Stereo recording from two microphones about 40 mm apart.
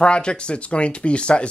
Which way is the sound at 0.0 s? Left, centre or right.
Left.